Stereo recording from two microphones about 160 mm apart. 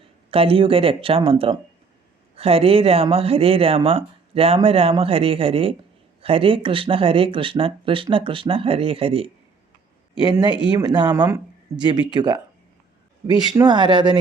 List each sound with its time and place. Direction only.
0.0 s speech: 35° right (ahead or behind)